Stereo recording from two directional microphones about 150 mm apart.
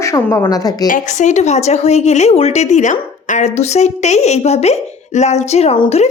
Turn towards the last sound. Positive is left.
turn(degrees=30)  # may be behind; listen again after turning